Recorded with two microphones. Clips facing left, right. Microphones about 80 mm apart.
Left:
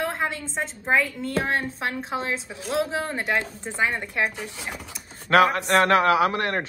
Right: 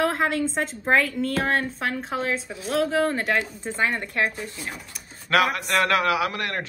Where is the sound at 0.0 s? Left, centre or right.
Centre.